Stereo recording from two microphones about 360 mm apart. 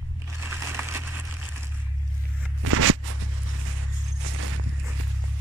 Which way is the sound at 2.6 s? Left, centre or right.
Right.